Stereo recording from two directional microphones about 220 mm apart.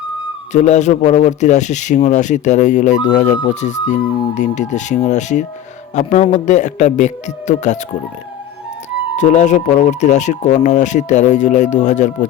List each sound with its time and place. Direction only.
0.5 s speech: 35° left (ahead or behind)
9.1 s speech: 35° left (ahead or behind)